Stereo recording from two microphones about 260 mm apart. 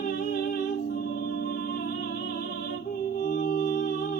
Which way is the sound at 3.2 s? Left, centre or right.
Left.